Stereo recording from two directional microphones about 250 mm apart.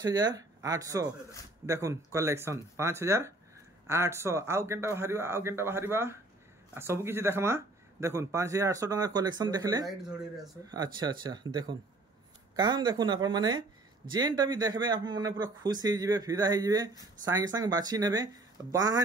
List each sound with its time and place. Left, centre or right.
0.0 s speech: centre